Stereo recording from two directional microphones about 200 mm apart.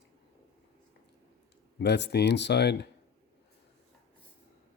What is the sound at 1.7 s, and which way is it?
Speech, 60° left (ahead or behind).